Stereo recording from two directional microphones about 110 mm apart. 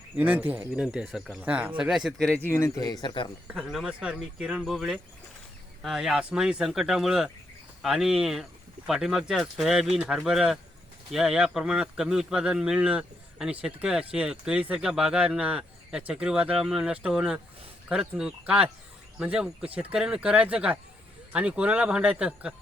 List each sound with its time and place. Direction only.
0.2 s speech: 15° right (ahead or behind)
0.7 s speech: 5° right (ahead or behind)
2.0 s speech: 5° left (ahead or behind)
2.4 s speech: 20° left (ahead or behind); by 3.3 s 40° left (ahead or behind)
3.5 s speech: centre (ahead or behind)